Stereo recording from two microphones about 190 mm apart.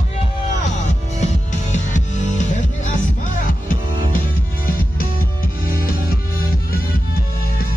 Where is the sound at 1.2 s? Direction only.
40° left (ahead or behind).